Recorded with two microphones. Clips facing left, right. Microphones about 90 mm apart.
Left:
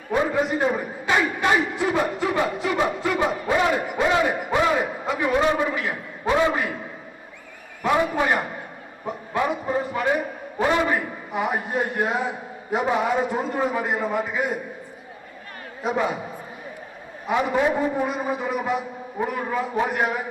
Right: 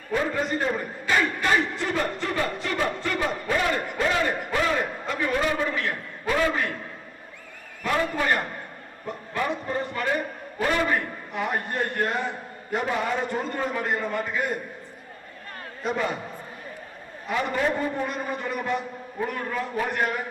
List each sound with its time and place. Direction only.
0.3 s a man's voice: 5° left (ahead or behind)
5.6 s a man's voice: 5° left (ahead or behind)
6.2 s a man's voice: 20° left (ahead or behind)
6.5 s a man's voice: 5° left (ahead or behind)
7.8 s a man's voice: 15° left (ahead or behind)
15.8 s a man's voice: 5° left (ahead or behind)
17.2 s a man's voice: 10° left (ahead or behind)